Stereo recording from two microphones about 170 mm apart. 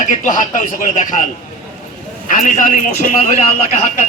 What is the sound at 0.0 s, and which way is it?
A man's voice, 50° left (ahead or behind).